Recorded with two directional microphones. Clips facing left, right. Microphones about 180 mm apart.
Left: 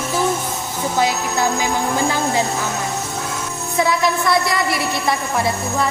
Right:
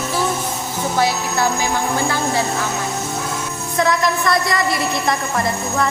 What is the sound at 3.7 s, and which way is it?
Music, 5° left (ahead or behind).